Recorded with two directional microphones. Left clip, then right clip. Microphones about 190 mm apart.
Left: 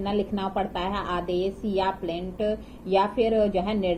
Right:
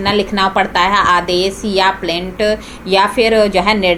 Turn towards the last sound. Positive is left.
turn(degrees=0)  # may be behind; listen again after turning